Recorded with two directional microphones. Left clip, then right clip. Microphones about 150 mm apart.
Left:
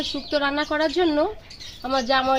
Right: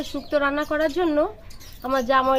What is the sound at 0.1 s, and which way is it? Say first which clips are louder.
A woman's voice: right 3 dB; 10° right (ahead or behind).